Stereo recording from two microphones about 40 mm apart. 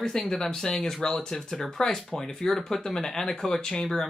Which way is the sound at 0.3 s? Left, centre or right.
Centre.